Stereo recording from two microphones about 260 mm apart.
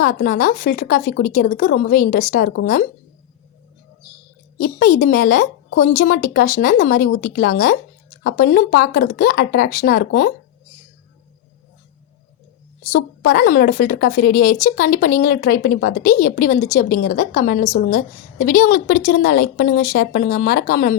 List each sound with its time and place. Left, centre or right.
0.0 s a woman's voice: left
4.6 s a woman's voice: left
12.9 s a woman's voice: left